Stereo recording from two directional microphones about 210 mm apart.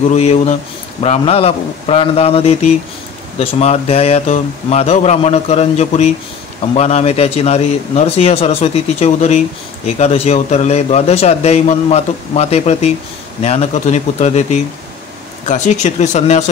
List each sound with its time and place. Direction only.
0.1 s a man's voice: 30° left (ahead or behind)